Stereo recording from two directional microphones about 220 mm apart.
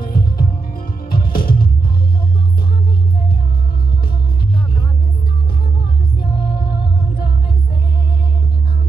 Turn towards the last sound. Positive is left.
turn(degrees=45)  # may be behind; listen again after turning